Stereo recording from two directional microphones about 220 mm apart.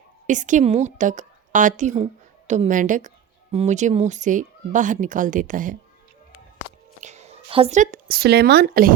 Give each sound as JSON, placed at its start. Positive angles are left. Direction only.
{"t": 0.3, "sound": "speech", "side_deg": -35}
{"t": 7.0, "sound": "speech", "side_deg": -30}